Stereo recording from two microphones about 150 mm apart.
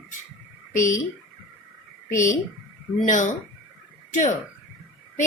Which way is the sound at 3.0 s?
60° left (ahead or behind).